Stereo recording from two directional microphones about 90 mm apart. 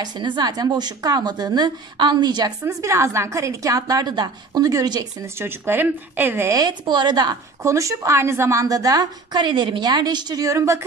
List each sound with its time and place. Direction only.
0.0 s speech: 55° right (ahead or behind)
2.6 s a woman's voice: 35° right (ahead or behind)
5.2 s speech: 25° right (ahead or behind)
6.5 s speech: 50° right (ahead or behind)
7.6 s a woman's voice: 35° right (ahead or behind)
9.4 s speech: 65° right (ahead or behind); by 10.9 s 35° right (ahead or behind)